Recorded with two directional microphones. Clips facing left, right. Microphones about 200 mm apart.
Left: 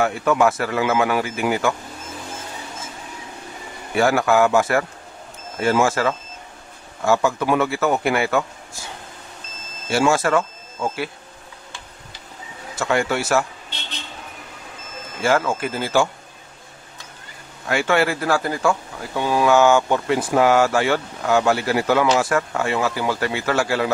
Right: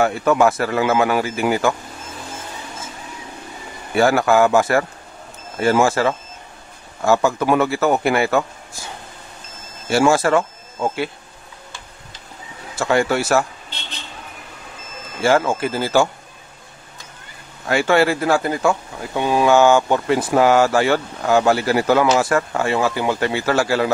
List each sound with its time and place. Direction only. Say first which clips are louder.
0.0 s speech: right 2 dB; 40° right (ahead or behind)
4.0 s speech: right 2 dB; 35° right (ahead or behind)
7.1 s speech: right 2 dB; 45° right (ahead or behind)
9.9 s speech: right 3 dB; 35° right (ahead or behind)
12.7 s speech: right 3 dB; 35° right (ahead or behind)
15.2 s speech: right 3 dB; 25° right (ahead or behind)
17.6 s speech: right 3 dB; 35° right (ahead or behind)